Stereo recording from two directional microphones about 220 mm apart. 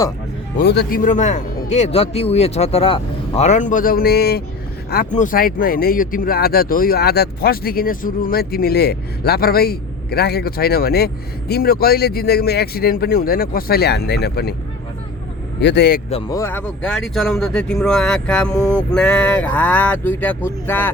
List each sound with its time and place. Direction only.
0.6 s a man's voice: 50° left (ahead or behind)
15.6 s speech: 50° left (ahead or behind)
16.3 s speech: 10° left (ahead or behind)